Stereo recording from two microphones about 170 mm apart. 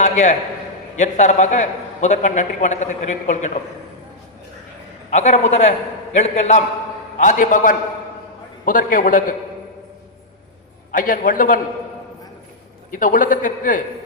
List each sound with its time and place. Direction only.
0.0 s a sound: 45° left (ahead or behind)
0.9 s a man's voice: 45° left (ahead or behind)
5.1 s a man's voice: 45° left (ahead or behind)
10.9 s a man's voice: 50° left (ahead or behind)
12.9 s a man's voice: 50° left (ahead or behind)